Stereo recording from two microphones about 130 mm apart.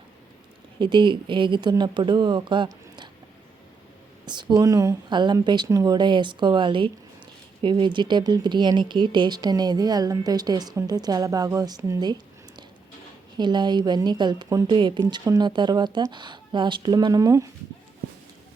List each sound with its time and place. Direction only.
0.8 s speech: 40° right (ahead or behind)
4.3 s speech: 35° right (ahead or behind)